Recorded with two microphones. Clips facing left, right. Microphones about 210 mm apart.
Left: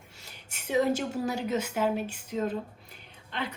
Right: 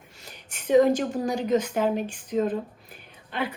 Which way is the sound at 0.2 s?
10° left (ahead or behind).